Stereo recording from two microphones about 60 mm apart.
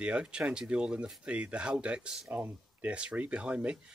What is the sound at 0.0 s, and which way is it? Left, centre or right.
Speech, centre.